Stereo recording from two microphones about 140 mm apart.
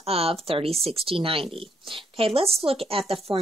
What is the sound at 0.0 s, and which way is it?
Speech, 45° right (ahead or behind).